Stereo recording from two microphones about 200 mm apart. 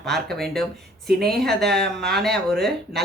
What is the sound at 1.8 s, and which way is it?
Speech, 50° right (ahead or behind).